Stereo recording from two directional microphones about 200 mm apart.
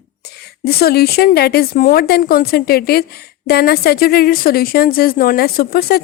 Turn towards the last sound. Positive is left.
turn(degrees=50)  # may be behind; listen again after turning